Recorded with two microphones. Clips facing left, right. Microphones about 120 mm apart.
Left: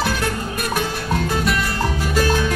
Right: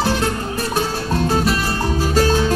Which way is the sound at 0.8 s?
35° right (ahead or behind).